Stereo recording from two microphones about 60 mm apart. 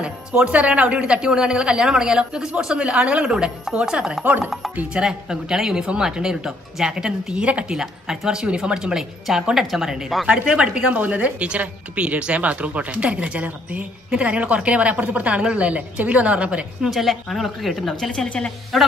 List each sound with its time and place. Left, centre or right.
0.0 s speech: centre
4.2 s speech: right
4.9 s speech: centre
7.7 s speech: centre
10.2 s speech: centre
16.8 s speech: centre
18.7 s speech: centre